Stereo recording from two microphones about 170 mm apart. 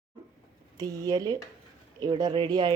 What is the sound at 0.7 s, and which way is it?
Speech, 20° right (ahead or behind).